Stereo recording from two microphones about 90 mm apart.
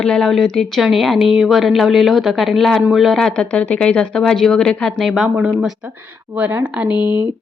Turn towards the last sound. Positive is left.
turn(degrees=-20)  # may be behind; listen again after turning